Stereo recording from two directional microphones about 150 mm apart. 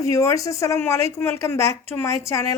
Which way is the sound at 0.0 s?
20° left (ahead or behind).